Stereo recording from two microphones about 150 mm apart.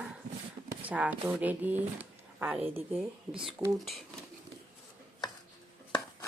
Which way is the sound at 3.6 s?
20° right (ahead or behind).